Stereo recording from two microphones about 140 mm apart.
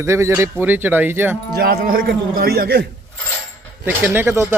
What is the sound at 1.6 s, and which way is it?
A man's voice, 90° right.